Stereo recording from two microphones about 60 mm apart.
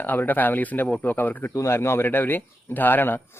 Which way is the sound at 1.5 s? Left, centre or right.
Left.